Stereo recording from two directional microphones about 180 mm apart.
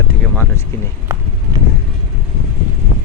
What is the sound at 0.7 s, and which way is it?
Speech, 15° left (ahead or behind).